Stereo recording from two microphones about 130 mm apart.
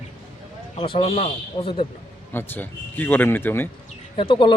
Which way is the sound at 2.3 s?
15° left (ahead or behind).